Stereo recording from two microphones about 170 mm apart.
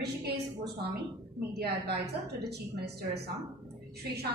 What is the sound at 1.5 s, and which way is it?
A woman's voice, 70° right (ahead or behind).